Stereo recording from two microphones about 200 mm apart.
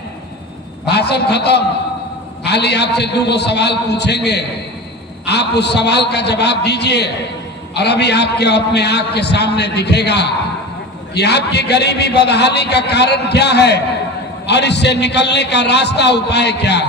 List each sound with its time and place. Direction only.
0.8 s a man's voice: 55° left (ahead or behind)